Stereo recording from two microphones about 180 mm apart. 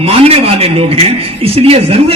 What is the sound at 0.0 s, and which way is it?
A man's voice, 35° right (ahead or behind).